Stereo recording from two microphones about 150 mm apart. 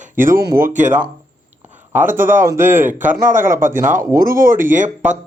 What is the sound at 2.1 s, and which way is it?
Speech, 15° right (ahead or behind).